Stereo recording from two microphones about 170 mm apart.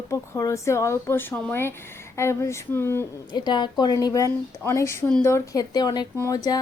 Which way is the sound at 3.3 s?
25° left (ahead or behind).